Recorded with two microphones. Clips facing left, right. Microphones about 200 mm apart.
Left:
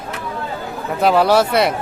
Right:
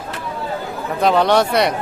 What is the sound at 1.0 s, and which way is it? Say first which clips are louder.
Speech: left 1 dB; 5° left (ahead or behind).